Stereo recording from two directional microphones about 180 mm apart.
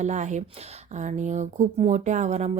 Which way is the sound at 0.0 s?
40° right (ahead or behind).